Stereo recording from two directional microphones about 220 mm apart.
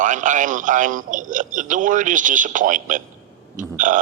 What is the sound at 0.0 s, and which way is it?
Speech, 35° right (ahead or behind).